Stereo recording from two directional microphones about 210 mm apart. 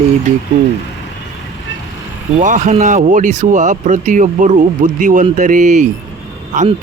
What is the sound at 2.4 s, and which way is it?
Speech, 35° right (ahead or behind).